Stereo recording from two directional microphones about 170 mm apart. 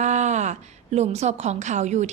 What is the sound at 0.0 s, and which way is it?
A woman's voice, 45° right (ahead or behind).